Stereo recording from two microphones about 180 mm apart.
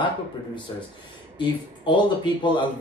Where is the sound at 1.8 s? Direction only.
25° left (ahead or behind).